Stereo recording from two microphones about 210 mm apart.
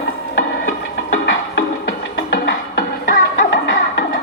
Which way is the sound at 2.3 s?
45° left (ahead or behind).